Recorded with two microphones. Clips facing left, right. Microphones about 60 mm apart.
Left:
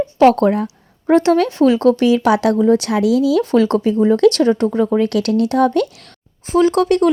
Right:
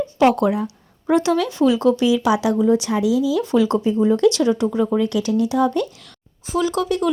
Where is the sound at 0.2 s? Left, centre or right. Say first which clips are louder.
Left 5 dB; left.